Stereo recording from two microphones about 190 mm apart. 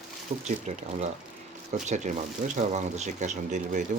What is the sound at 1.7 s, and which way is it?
Speech, 40° right (ahead or behind).